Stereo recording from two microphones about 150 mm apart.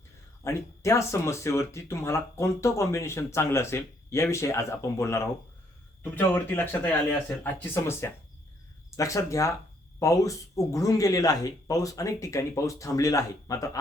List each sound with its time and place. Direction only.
0.4 s speech: 20° left (ahead or behind)